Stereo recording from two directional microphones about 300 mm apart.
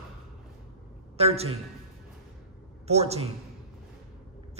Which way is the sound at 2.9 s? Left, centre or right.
Right.